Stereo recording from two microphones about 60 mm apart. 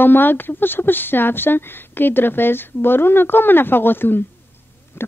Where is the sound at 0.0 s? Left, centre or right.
Left.